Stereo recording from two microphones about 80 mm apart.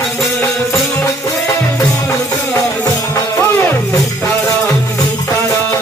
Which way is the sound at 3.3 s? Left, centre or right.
Left.